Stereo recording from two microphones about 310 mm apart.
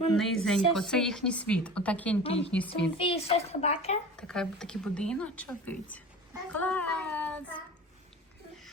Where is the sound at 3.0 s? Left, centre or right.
Centre.